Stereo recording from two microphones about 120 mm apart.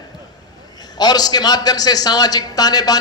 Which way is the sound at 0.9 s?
35° left (ahead or behind).